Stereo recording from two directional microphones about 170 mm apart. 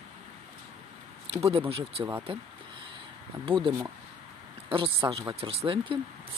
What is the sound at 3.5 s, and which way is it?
Speech, 30° right (ahead or behind).